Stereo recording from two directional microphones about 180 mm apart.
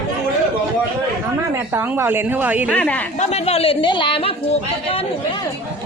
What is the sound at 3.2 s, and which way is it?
Speech, 35° left (ahead or behind).